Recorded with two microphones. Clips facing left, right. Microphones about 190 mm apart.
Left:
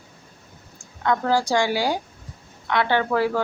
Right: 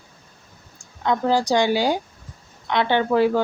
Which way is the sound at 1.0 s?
20° right (ahead or behind).